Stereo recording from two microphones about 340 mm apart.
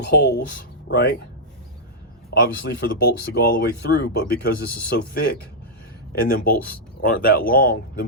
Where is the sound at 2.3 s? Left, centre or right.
Left.